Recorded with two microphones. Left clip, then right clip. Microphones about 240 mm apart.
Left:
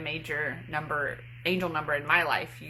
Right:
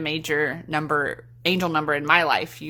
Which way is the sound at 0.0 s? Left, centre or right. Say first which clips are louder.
Right 8 dB; right.